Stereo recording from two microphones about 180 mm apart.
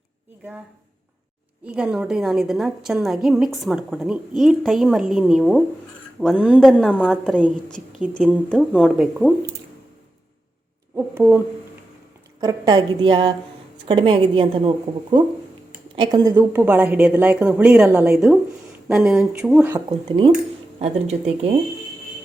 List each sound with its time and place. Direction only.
1.6 s a woman's voice: 5° right (ahead or behind)
10.9 s a woman's voice: 10° right (ahead or behind)
12.4 s a woman's voice: 20° right (ahead or behind)
16.0 s a woman's voice: 25° right (ahead or behind)
16.3 s a woman's voice: 10° right (ahead or behind)
20.1 s speech: 30° right (ahead or behind)